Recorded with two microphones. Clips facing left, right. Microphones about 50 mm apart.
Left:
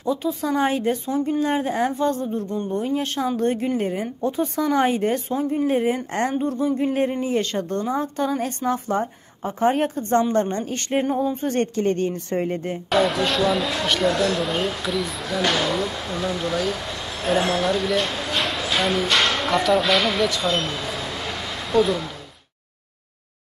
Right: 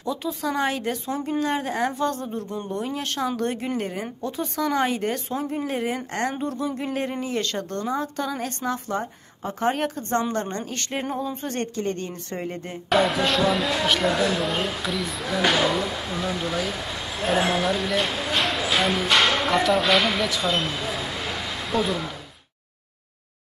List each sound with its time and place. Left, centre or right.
0.2 s a woman's voice: centre; by 12.7 s left
12.9 s speech: centre